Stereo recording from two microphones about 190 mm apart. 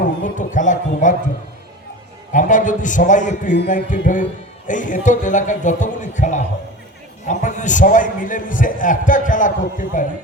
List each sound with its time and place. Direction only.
0.0 s speech: 40° left (ahead or behind)
2.3 s a man's voice: 40° left (ahead or behind)